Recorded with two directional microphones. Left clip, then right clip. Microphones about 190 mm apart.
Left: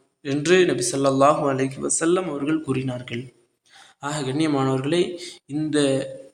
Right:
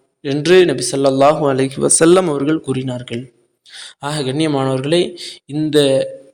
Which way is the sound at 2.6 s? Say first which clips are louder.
Right 5 dB; 25° right (ahead or behind).